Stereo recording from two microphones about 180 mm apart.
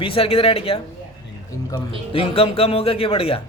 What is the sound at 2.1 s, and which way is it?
Speech, 30° left (ahead or behind).